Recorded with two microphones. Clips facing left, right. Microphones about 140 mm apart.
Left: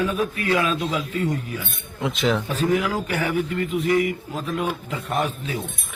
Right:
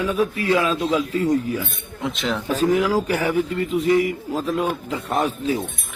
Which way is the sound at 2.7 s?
25° right (ahead or behind).